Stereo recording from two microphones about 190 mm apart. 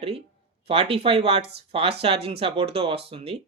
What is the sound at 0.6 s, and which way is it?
Speech, 30° right (ahead or behind).